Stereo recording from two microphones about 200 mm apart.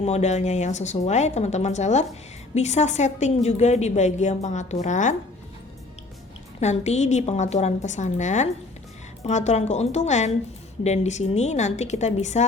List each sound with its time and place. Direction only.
0.0 s a woman's voice: 35° left (ahead or behind)
6.6 s a woman's voice: 35° left (ahead or behind)